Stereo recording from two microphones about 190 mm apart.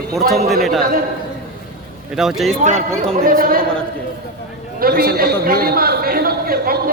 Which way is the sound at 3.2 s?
50° right (ahead or behind).